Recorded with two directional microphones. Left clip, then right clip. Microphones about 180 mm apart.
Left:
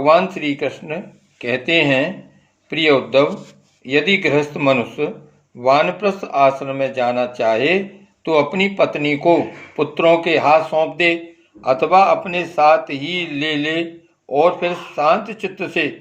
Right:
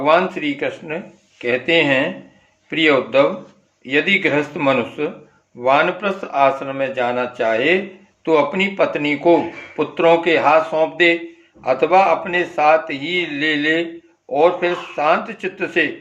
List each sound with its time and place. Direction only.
0.0 s speech: 30° left (ahead or behind)